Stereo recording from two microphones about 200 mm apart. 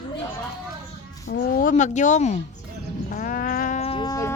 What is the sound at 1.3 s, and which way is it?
Speech, 40° left (ahead or behind).